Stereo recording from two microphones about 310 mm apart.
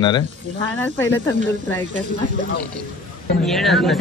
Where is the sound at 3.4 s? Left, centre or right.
Centre.